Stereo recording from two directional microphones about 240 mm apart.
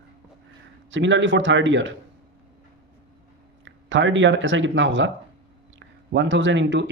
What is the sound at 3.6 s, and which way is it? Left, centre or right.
Speech, right.